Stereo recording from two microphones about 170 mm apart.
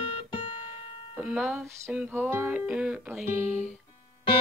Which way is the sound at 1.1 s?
5° right (ahead or behind).